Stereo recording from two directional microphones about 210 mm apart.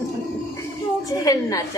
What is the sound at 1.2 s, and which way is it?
Speech, 15° left (ahead or behind).